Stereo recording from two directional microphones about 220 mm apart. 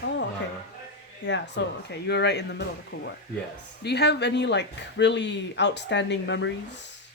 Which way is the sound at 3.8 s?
50° left (ahead or behind).